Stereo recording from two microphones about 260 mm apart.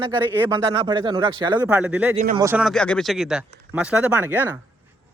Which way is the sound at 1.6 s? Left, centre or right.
Centre.